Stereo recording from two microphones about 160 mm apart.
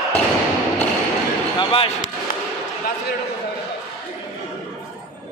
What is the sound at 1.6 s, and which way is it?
Speech, 30° left (ahead or behind).